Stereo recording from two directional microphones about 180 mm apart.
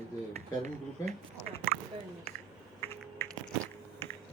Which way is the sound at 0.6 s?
35° right (ahead or behind).